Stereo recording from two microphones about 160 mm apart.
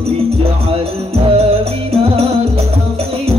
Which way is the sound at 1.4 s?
40° right (ahead or behind).